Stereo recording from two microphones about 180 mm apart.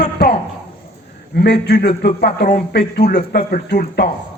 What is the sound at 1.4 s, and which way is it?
A man's voice, 65° left (ahead or behind).